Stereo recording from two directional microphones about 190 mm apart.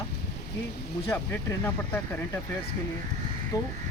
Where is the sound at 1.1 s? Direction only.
10° left (ahead or behind).